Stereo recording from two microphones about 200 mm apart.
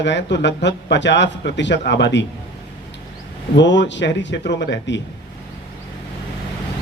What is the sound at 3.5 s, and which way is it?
Speech, 60° left (ahead or behind).